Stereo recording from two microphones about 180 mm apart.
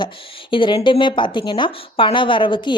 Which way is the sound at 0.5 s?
25° left (ahead or behind).